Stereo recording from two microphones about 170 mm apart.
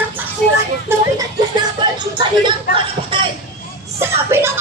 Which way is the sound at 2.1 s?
30° right (ahead or behind).